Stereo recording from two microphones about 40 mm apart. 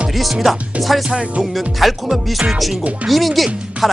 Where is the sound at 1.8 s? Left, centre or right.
Centre.